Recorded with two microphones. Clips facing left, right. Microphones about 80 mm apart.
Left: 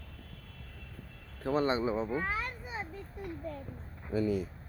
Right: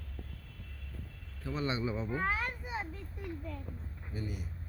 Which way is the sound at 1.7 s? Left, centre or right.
Left.